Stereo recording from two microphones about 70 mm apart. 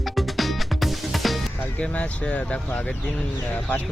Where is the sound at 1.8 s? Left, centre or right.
Left.